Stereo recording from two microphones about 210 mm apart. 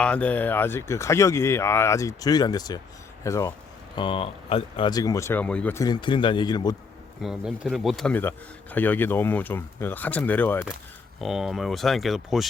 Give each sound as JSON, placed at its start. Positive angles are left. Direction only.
{"t": 0.0, "sound": "speech", "side_deg": 5}
{"t": 7.2, "sound": "speech", "side_deg": 0}